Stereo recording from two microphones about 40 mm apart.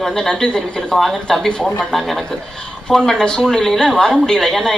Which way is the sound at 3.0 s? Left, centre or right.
Centre.